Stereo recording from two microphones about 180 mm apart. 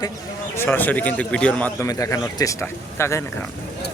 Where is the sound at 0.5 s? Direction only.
10° left (ahead or behind).